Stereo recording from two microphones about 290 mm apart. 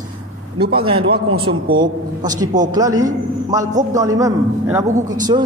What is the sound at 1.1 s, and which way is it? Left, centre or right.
Speech, right.